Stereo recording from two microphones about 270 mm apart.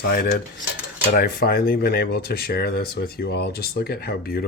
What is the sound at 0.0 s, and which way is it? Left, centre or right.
Speech, left.